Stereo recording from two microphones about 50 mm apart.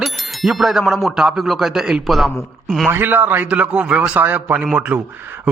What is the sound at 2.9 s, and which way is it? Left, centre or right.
Speech, right.